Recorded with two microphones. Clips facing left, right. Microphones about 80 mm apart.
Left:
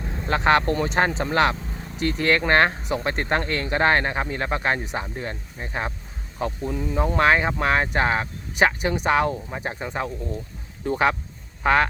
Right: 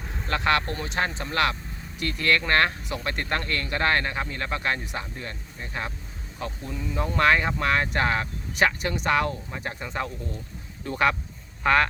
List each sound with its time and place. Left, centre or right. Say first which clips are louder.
0.3 s speech: left 5 dB; left
6.7 s speech: left 6 dB; left
6.9 s speech: left 2 dB; left